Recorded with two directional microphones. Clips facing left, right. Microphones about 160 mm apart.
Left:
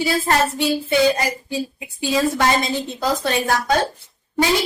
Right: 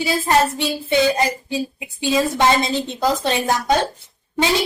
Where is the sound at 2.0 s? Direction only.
20° right (ahead or behind).